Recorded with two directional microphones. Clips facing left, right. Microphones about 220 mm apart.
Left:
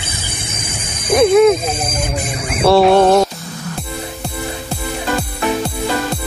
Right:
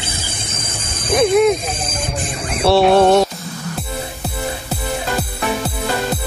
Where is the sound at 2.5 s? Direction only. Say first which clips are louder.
Left 2 dB; centre (ahead or behind).